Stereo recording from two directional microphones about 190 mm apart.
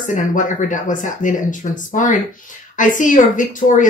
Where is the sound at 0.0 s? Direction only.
40° left (ahead or behind).